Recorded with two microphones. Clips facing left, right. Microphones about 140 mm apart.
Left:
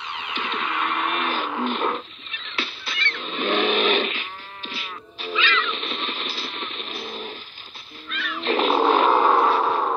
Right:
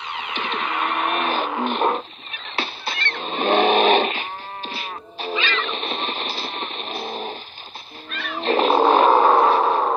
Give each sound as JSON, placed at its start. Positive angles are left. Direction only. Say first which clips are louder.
{"t": 0.3, "sound": "music", "louder": "right 2 dB", "side_deg": -20}
{"t": 1.9, "sound": "vehicle", "louder": "right 5 dB", "side_deg": -40}
{"t": 8.1, "sound": "cat", "louder": "right 3 dB", "side_deg": -40}
{"t": 9.3, "sound": "a sound", "louder": "right 3 dB", "side_deg": -25}